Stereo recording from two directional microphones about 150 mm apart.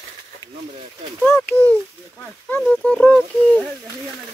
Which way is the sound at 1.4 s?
10° left (ahead or behind).